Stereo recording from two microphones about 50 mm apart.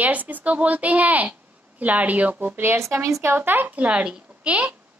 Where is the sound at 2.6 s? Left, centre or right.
Right.